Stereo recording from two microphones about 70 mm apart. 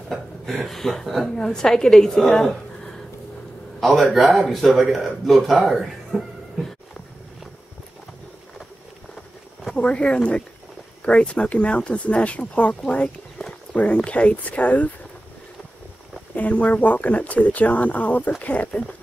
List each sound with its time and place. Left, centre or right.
0.1 s speech: centre
9.8 s speech: centre
16.3 s speech: left